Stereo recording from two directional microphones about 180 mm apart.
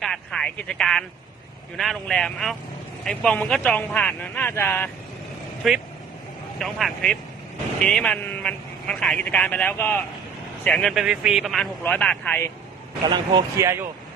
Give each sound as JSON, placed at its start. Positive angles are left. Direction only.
{"t": 0.0, "sound": "a man's voice", "side_deg": 5}
{"t": 5.6, "sound": "a man's voice", "side_deg": 0}
{"t": 13.1, "sound": "speech", "side_deg": -25}